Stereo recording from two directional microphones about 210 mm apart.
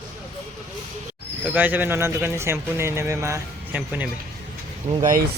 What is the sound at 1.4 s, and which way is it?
Speech, 10° right (ahead or behind).